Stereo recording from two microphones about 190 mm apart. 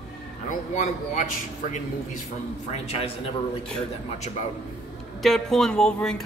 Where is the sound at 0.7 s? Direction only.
40° left (ahead or behind).